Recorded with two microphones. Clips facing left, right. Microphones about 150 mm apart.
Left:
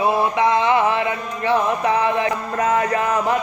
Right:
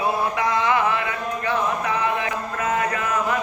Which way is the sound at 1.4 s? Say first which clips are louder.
Left 6 dB; 30° left (ahead or behind).